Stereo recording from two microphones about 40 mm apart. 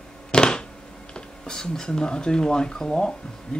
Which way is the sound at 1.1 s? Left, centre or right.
Centre.